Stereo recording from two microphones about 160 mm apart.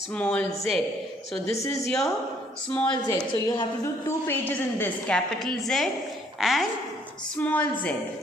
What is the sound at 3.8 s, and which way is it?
A woman's voice, 15° left (ahead or behind).